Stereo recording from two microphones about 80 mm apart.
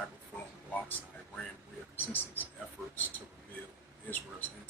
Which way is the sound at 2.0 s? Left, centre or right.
Left.